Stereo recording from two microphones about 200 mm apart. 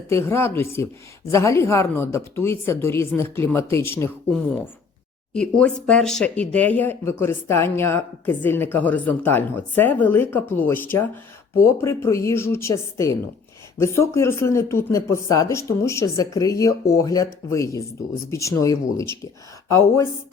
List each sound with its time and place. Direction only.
0.1 s speech: 10° left (ahead or behind)